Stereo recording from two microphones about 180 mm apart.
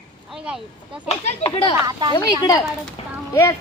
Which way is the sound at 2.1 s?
20° left (ahead or behind).